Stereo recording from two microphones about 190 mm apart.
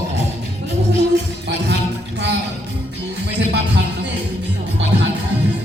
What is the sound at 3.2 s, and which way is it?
Music, 65° right (ahead or behind).